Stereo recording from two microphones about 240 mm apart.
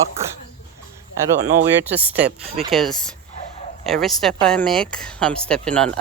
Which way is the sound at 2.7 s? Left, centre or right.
Centre.